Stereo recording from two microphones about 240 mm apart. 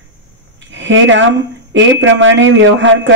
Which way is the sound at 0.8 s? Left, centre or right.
Right.